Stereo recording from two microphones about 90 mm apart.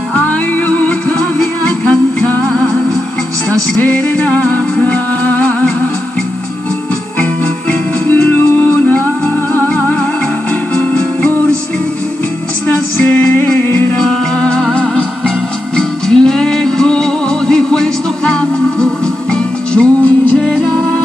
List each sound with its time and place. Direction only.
0.1 s music: 15° left (ahead or behind)
3.8 s music: 15° left (ahead or behind)
8.1 s music: 15° left (ahead or behind)
13.0 s music: 25° left (ahead or behind)
13.9 s music: 10° left (ahead or behind)